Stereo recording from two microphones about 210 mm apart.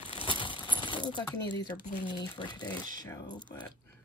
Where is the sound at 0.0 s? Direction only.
25° left (ahead or behind).